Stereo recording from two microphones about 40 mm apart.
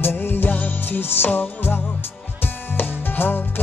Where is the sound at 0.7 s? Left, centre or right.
Left.